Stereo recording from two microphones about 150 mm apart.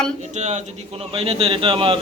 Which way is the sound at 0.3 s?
50° right (ahead or behind).